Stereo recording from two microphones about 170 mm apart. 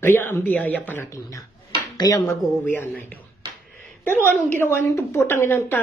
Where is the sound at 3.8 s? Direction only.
10° left (ahead or behind).